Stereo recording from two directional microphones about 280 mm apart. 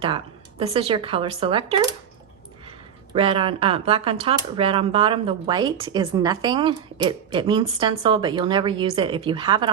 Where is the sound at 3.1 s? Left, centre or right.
Centre.